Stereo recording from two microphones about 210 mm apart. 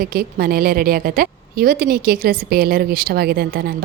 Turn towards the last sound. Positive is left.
turn(degrees=-45)  # may be behind; listen again after turning